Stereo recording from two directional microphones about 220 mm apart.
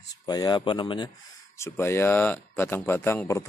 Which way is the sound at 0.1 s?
15° left (ahead or behind).